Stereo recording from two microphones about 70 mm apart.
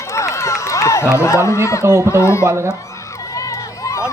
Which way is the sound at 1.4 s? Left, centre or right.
Left.